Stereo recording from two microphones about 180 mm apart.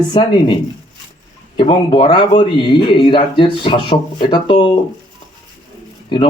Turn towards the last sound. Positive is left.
turn(degrees=30)  # may be behind; listen again after turning